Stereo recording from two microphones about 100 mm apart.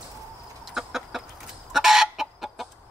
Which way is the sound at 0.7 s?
5° right (ahead or behind).